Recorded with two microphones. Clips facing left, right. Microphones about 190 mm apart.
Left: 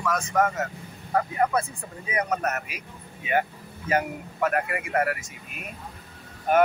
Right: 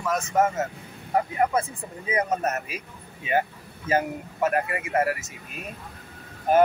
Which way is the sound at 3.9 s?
25° right (ahead or behind).